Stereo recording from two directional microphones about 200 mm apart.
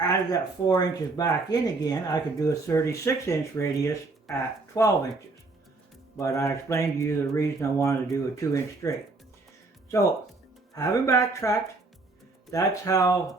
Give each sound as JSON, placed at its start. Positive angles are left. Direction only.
{"t": 0.0, "sound": "speech", "side_deg": 20}
{"t": 6.1, "sound": "speech", "side_deg": 15}
{"t": 10.8, "sound": "speech", "side_deg": 15}